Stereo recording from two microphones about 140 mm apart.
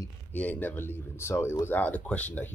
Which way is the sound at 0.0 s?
10° left (ahead or behind).